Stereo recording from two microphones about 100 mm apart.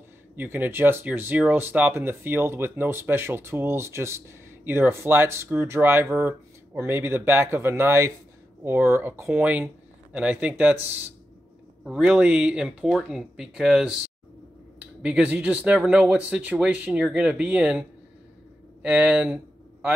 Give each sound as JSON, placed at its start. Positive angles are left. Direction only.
{"t": 0.4, "sound": "speech", "side_deg": -20}
{"t": 15.0, "sound": "speech", "side_deg": -10}